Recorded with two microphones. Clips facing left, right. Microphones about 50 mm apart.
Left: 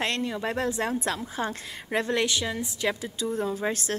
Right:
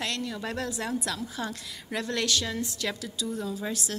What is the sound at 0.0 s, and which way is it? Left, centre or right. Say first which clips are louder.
A woman's voice: left 4 dB; left.